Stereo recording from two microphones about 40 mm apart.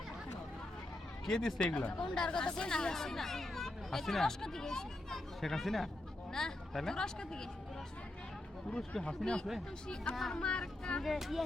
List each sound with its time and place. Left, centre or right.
1.2 s speech: centre
9.0 s speech: centre
11.0 s speech: centre